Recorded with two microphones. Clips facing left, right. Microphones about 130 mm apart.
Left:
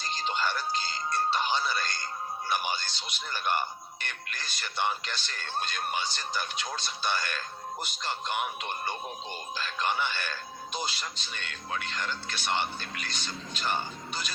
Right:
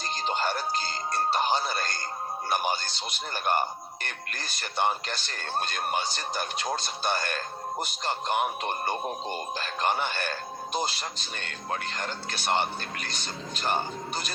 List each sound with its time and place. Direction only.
0.3 s speech: 45° right (ahead or behind)